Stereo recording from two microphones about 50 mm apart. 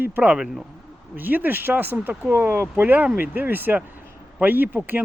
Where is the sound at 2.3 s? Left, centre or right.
Right.